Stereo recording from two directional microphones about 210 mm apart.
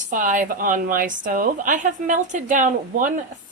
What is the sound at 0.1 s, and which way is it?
A woman's voice, 40° right (ahead or behind).